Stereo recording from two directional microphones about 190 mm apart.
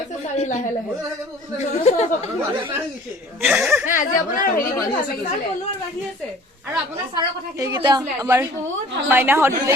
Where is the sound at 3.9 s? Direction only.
45° left (ahead or behind).